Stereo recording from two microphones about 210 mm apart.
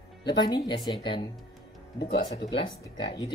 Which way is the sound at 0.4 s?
20° left (ahead or behind).